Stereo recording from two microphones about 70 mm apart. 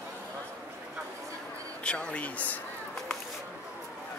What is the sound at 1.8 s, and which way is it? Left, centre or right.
Speech, centre.